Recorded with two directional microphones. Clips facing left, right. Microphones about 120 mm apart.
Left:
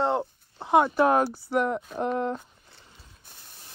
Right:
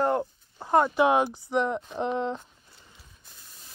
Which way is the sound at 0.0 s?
25° left (ahead or behind).